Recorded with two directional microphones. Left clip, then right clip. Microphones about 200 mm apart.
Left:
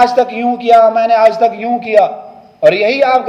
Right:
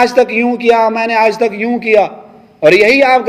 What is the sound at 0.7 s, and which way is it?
A man's voice, 45° right (ahead or behind).